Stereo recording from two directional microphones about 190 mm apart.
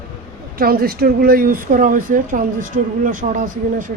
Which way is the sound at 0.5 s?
50° right (ahead or behind).